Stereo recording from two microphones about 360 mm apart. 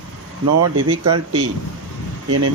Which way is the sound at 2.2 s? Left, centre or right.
Right.